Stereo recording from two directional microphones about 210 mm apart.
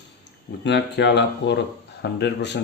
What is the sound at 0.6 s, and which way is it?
Speech, 55° left (ahead or behind).